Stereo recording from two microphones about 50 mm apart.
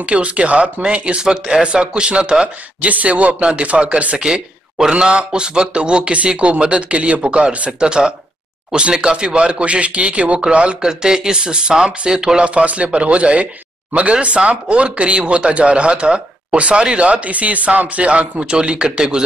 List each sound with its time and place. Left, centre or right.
0.0 s speech: right
4.2 s speech: centre
12.4 s speech: right